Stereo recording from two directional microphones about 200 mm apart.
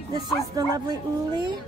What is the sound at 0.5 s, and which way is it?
Speech, 20° right (ahead or behind).